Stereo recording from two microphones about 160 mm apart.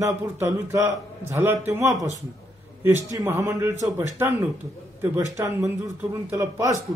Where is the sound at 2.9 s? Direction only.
20° right (ahead or behind).